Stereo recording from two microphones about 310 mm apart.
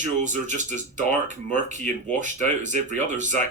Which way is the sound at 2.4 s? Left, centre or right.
Right.